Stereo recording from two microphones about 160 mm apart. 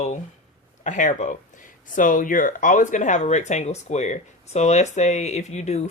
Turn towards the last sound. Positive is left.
turn(degrees=45)  # may be behind; listen again after turning